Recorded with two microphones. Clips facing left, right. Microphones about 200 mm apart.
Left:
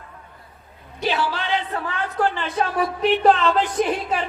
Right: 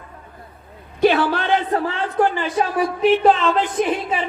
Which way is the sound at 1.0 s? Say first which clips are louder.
Right 7 dB; 55° right (ahead or behind).